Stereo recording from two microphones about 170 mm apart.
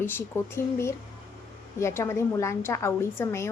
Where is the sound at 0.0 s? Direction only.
15° left (ahead or behind).